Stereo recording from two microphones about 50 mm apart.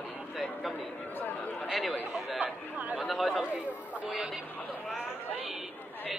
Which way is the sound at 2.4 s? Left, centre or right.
Right.